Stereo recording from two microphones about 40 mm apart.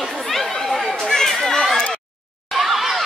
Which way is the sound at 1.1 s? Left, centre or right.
Centre.